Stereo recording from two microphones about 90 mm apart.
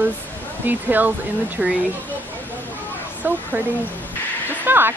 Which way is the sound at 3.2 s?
25° right (ahead or behind).